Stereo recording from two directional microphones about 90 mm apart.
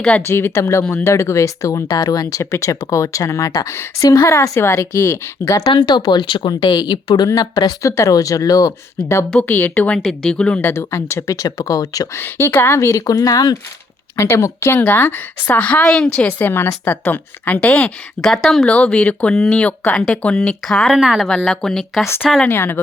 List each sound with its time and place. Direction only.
0.2 s speech: 25° left (ahead or behind)
5.6 s speech: 65° left (ahead or behind)
7.3 s speech: 45° left (ahead or behind)
9.3 s speech: 20° left (ahead or behind)
10.6 s speech: 30° left (ahead or behind)
12.1 s speech: 25° left (ahead or behind); by 13.6 s 45° left (ahead or behind)
14.2 s speech: 30° left (ahead or behind)
14.8 s speech: 20° left (ahead or behind)
16.4 s speech: 25° left (ahead or behind); by 20.9 s 5° left (ahead or behind)
20.9 s speech: 5° right (ahead or behind)
21.2 s speech: 5° left (ahead or behind)
22.4 s speech: 25° left (ahead or behind)